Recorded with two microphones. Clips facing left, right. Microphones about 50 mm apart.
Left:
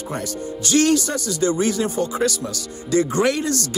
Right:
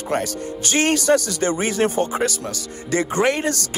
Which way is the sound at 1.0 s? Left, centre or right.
Right.